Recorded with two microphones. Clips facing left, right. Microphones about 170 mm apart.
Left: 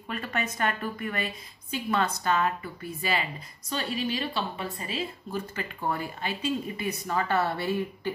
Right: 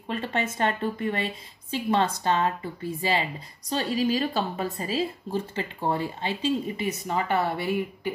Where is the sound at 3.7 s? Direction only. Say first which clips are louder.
Right 5 dB; 35° right (ahead or behind).